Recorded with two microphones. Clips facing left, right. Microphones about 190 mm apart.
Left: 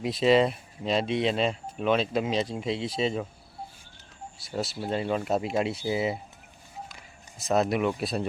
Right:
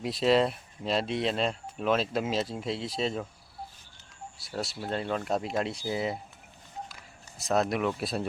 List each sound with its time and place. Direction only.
0.0 s speech: centre (ahead or behind)
4.4 s speech: centre (ahead or behind)
7.3 s speech: centre (ahead or behind)